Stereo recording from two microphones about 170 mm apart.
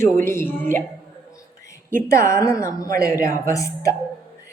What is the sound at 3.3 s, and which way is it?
Speech, 20° left (ahead or behind).